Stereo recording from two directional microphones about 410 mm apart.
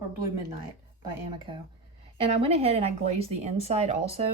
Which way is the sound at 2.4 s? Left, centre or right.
Centre.